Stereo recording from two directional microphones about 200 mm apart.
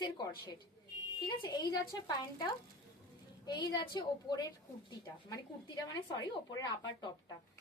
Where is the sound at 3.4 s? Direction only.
20° left (ahead or behind).